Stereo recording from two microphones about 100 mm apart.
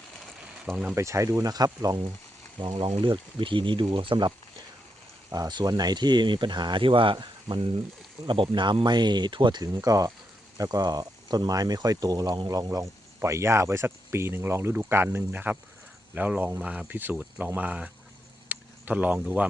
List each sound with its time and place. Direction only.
0.9 s speech: 30° right (ahead or behind)
2.6 s speech: 55° right (ahead or behind)
5.3 s speech: 45° right (ahead or behind); by 17.9 s 15° right (ahead or behind)
18.4 s a sound: 15° right (ahead or behind)